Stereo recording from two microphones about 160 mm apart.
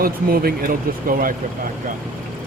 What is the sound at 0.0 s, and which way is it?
Speech, 70° right (ahead or behind).